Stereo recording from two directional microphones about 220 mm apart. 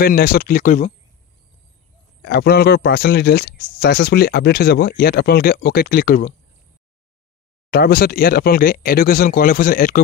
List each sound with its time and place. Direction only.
0.0 s speech: 45° left (ahead or behind)
2.2 s speech: 45° left (ahead or behind)
7.7 s speech: 45° left (ahead or behind)